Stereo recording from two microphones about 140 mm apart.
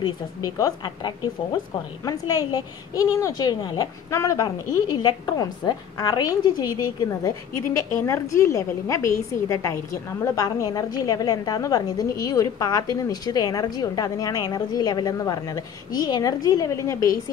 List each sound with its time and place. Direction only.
0.0 s a woman's voice: 25° left (ahead or behind)